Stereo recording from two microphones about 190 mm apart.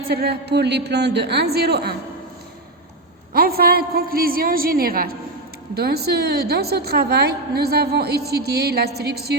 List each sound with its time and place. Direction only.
0.1 s a woman's voice: 60° right (ahead or behind)
3.3 s a woman's voice: 50° right (ahead or behind)